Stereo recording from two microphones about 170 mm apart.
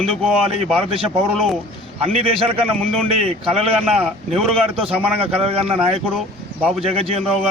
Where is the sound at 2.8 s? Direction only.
5° left (ahead or behind).